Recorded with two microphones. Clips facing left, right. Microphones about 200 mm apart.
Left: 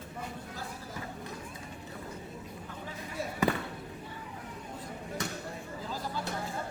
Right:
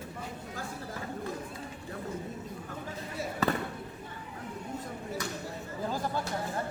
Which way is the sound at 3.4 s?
15° left (ahead or behind).